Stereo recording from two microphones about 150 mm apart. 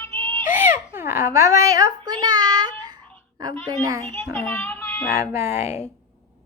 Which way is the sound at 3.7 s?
20° right (ahead or behind).